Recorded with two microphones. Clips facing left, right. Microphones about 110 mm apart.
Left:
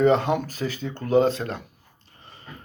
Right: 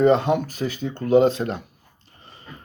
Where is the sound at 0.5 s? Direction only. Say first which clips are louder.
Right 2 dB; 15° right (ahead or behind).